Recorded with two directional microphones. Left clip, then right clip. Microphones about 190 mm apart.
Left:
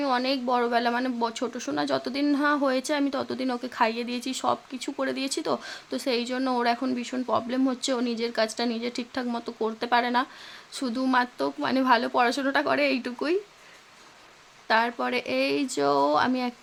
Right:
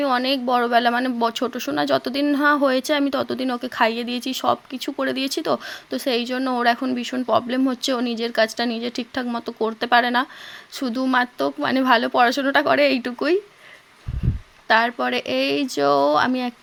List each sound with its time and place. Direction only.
0.0 s speech: 20° right (ahead or behind)
14.7 s speech: 20° right (ahead or behind)